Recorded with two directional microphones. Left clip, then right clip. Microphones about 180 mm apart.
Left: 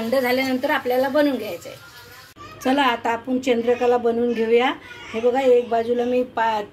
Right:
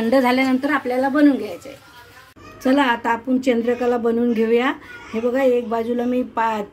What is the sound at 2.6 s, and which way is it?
A woman's voice, 55° right (ahead or behind).